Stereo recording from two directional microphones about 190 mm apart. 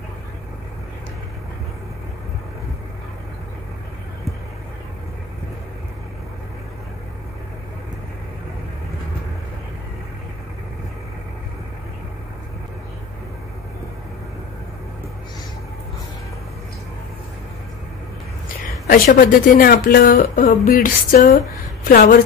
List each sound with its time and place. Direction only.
18.9 s speech: 50° left (ahead or behind)